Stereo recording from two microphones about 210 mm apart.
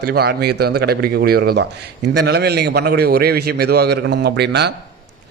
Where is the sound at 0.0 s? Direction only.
50° right (ahead or behind).